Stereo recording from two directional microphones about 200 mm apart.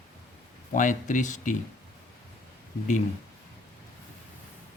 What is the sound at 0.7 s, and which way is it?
Speech, 40° left (ahead or behind).